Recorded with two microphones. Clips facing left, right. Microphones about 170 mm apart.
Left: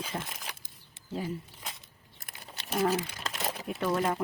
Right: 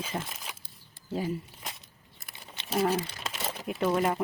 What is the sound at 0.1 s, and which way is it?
Speech, 15° right (ahead or behind).